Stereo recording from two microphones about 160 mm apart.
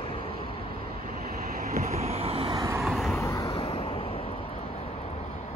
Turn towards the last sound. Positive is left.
turn(degrees=40)  # may be behind; listen again after turning